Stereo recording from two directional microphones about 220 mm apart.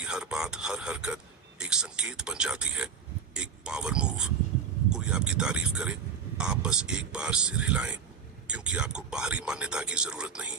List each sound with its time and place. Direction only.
0.0 s a man's voice: 5° right (ahead or behind)